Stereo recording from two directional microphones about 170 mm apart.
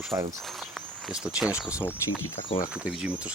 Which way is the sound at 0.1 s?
15° right (ahead or behind).